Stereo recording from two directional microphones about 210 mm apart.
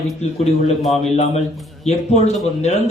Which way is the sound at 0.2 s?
30° left (ahead or behind).